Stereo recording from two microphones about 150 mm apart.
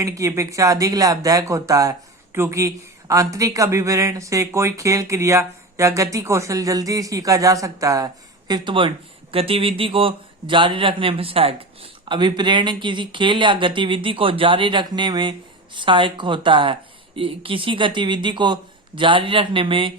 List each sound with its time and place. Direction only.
0.0 s a man's voice: 20° right (ahead or behind)